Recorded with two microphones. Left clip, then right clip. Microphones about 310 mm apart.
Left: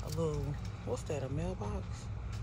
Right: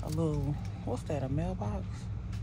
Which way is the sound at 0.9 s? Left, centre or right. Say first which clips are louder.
Right 2 dB; centre.